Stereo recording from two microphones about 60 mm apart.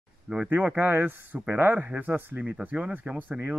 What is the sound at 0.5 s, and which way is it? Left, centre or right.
Speech, right.